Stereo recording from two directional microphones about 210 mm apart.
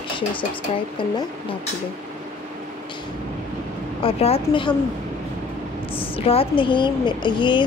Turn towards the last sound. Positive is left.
turn(degrees=20)  # may be behind; listen again after turning